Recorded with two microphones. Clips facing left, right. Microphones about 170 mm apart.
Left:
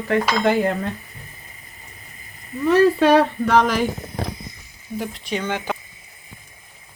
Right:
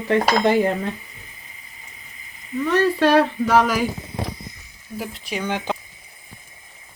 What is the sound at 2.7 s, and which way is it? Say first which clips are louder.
Speech: left 3 dB; centre (ahead or behind).